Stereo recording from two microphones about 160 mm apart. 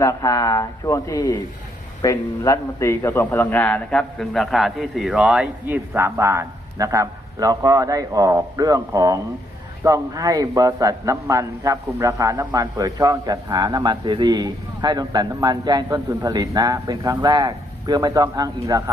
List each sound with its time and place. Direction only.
0.0 s a man's voice: 20° left (ahead or behind); by 18.8 s 20° right (ahead or behind)